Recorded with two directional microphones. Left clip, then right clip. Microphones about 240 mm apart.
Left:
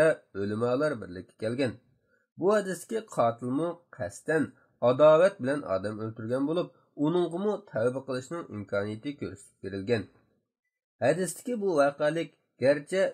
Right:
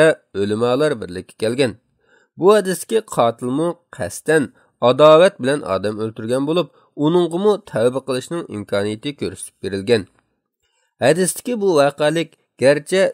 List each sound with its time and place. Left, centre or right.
0.0 s speech: right